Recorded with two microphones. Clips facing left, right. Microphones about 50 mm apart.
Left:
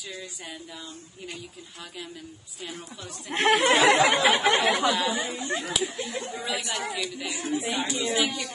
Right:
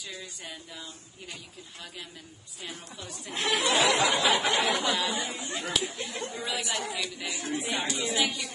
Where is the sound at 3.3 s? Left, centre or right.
Left.